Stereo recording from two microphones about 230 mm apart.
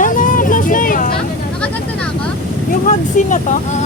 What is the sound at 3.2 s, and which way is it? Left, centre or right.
Speech, left.